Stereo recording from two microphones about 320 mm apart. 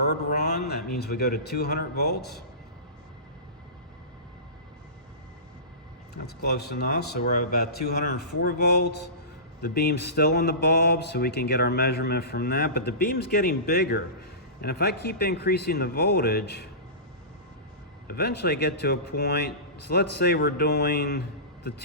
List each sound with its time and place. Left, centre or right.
0.3 s speech: left
6.1 s a man's voice: left
18.1 s a man's voice: left